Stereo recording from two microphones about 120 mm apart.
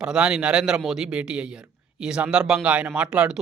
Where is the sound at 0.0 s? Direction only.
5° right (ahead or behind).